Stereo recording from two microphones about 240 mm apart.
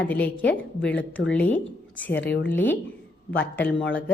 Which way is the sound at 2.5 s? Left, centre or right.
Centre.